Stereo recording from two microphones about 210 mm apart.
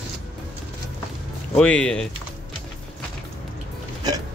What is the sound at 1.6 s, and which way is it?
Speech, 5° left (ahead or behind).